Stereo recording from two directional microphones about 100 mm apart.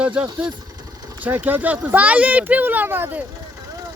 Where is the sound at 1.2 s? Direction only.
15° right (ahead or behind).